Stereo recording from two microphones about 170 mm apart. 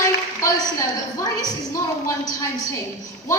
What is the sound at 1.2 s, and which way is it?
A woman's voice, 20° left (ahead or behind).